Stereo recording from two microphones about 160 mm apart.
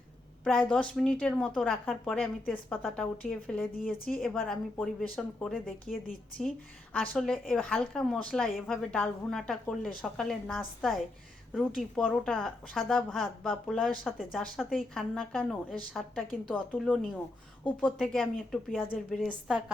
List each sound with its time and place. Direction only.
0.4 s a woman's voice: 5° left (ahead or behind)
3.9 s a woman's voice: 65° left (ahead or behind)
4.2 s a woman's voice: 5° left (ahead or behind)